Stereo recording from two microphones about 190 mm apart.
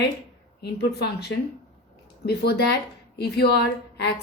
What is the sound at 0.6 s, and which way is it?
A woman's voice, 60° left (ahead or behind).